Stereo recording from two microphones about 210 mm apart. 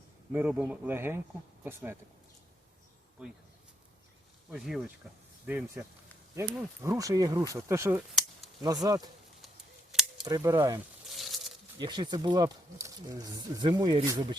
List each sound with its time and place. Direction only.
0.3 s speech: 10° right (ahead or behind)
4.5 s speech: centre (ahead or behind); by 9.0 s 20° right (ahead or behind)
9.9 s cap gun: centre (ahead or behind)
10.2 s speech: 15° right (ahead or behind)
11.1 s a sound: centre (ahead or behind)
11.8 s speech: 20° right (ahead or behind)